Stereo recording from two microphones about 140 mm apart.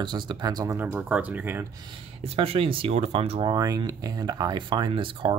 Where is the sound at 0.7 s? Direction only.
15° right (ahead or behind).